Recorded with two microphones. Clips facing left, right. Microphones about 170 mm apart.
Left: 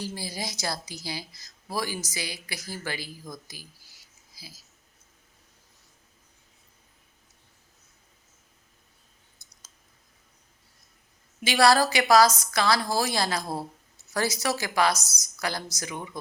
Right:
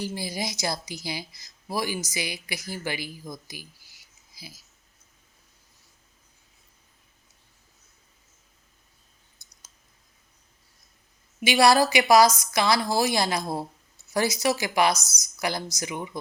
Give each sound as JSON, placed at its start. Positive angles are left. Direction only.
{"t": 0.0, "sound": "a woman's voice", "side_deg": -15}
{"t": 11.4, "sound": "a woman's voice", "side_deg": -15}